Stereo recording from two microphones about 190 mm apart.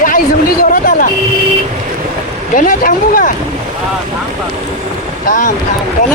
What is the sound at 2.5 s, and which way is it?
Speech, 45° left (ahead or behind).